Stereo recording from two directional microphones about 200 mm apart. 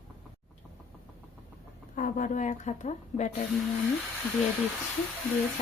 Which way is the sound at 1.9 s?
40° left (ahead or behind).